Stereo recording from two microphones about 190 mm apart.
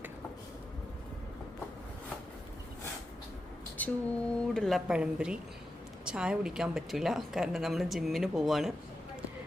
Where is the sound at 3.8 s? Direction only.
10° left (ahead or behind).